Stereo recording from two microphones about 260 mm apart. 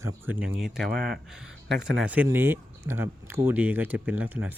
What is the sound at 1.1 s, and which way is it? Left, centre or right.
Speech, centre.